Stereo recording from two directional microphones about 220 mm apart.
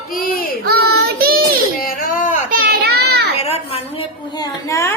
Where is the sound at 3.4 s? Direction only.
30° left (ahead or behind).